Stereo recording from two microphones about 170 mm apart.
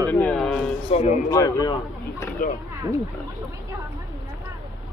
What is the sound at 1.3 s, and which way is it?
Speech, 20° left (ahead or behind).